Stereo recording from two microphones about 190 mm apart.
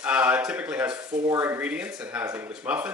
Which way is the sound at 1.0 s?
20° right (ahead or behind).